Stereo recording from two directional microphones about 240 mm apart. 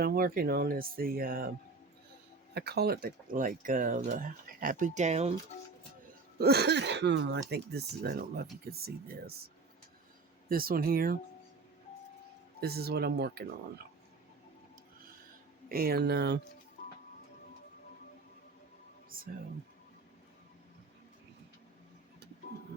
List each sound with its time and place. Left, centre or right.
0.0 s speech: right
2.6 s speech: right
6.4 s speech: right
10.5 s speech: right
12.5 s speech: right
15.7 s speech: right
19.1 s a sound: right